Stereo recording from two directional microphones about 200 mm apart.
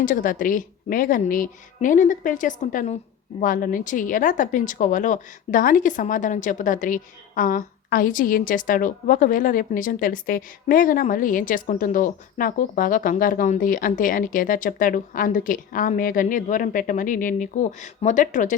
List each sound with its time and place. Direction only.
0.0 s a woman's voice: 45° left (ahead or behind)